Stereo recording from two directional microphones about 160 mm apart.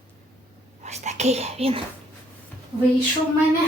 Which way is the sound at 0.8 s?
45° right (ahead or behind).